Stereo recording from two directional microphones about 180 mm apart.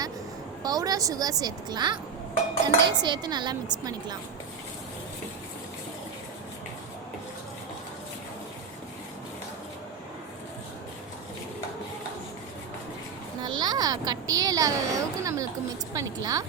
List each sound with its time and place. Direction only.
0.6 s speech: 20° right (ahead or behind)
13.4 s a sound: 20° right (ahead or behind)
16.0 s speech: 20° right (ahead or behind)